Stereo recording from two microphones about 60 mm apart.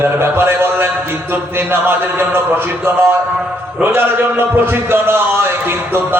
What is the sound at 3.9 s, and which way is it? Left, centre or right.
A man's voice, right.